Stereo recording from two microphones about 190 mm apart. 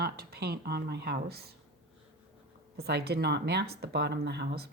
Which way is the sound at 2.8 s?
55° right (ahead or behind).